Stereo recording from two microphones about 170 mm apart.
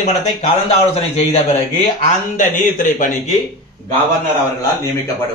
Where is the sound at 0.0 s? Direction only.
40° left (ahead or behind).